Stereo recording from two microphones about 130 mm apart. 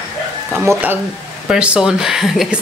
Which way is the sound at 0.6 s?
15° right (ahead or behind).